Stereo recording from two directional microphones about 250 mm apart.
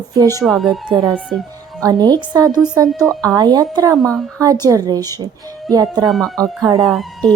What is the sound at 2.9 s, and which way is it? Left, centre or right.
Speech, centre.